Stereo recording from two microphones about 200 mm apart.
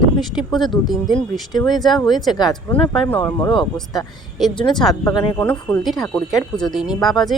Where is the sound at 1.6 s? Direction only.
20° left (ahead or behind).